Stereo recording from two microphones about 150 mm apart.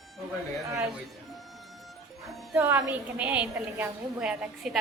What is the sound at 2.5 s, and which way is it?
A woman's voice, 15° right (ahead or behind).